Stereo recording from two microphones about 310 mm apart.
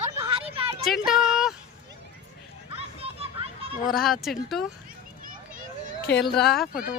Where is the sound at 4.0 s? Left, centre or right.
Centre.